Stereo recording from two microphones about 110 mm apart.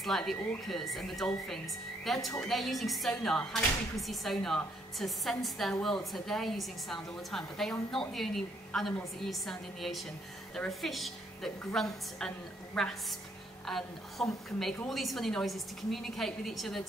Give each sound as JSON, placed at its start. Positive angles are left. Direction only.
{"t": 0.0, "sound": "a woman's voice", "side_deg": 0}